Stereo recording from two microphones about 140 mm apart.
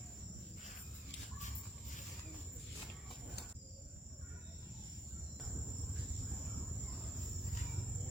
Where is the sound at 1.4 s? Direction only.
60° left (ahead or behind).